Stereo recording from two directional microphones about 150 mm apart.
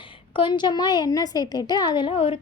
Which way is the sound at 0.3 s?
30° left (ahead or behind).